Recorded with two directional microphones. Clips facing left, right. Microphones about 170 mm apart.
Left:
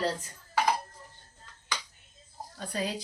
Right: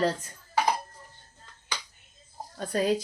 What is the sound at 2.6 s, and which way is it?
Speech, 50° right (ahead or behind).